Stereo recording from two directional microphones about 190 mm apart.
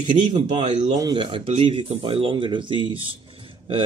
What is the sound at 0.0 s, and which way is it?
Speech, 40° right (ahead or behind).